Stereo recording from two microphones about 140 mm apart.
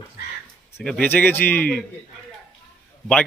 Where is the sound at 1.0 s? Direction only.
15° left (ahead or behind).